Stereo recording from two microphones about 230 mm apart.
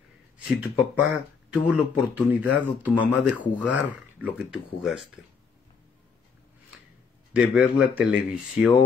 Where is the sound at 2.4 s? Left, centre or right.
Centre.